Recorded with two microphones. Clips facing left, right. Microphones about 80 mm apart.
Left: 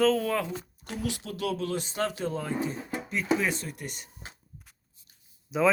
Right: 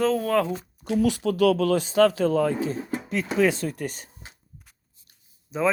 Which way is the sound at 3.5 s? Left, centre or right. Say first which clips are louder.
Right 9 dB; right.